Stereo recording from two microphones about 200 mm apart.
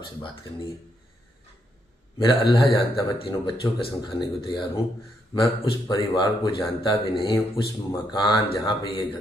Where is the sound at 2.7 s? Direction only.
25° left (ahead or behind).